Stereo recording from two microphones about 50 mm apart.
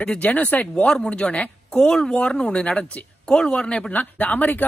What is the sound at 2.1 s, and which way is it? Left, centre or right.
Speech, left.